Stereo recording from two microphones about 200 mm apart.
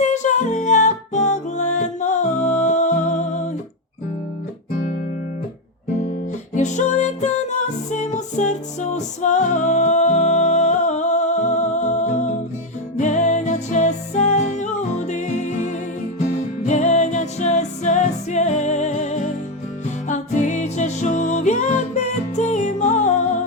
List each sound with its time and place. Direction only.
0.0 s music: 35° left (ahead or behind)
6.5 s music: 35° left (ahead or behind)